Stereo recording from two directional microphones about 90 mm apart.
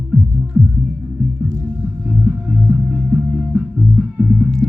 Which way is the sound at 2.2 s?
10° right (ahead or behind).